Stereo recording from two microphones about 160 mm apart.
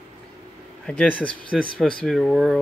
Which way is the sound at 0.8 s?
10° left (ahead or behind).